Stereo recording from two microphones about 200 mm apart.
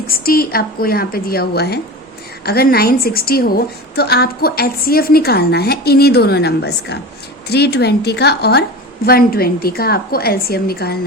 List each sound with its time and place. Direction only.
0.1 s a woman's voice: 50° left (ahead or behind)